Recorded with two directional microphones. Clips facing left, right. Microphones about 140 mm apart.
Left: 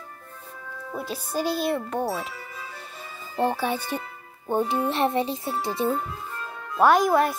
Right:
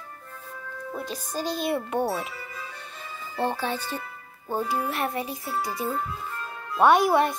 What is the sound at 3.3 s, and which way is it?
Speech, 10° left (ahead or behind).